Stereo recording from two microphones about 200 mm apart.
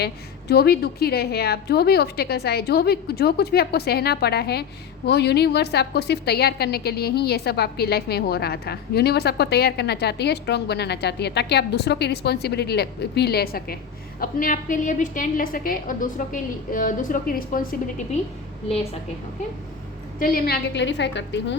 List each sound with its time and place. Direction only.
0.0 s a woman's voice: 55° left (ahead or behind)
20.1 s a woman's voice: 45° left (ahead or behind); by 21.5 s 60° left (ahead or behind)